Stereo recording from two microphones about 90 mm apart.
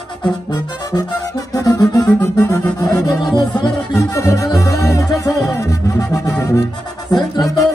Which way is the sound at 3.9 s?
35° left (ahead or behind).